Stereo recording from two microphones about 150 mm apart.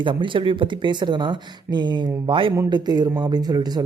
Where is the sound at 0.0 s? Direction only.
35° right (ahead or behind).